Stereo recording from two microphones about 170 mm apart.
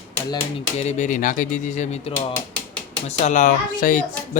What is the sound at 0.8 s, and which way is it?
Speech, 45° left (ahead or behind).